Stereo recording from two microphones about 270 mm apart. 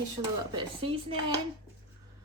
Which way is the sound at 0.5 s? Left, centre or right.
Centre.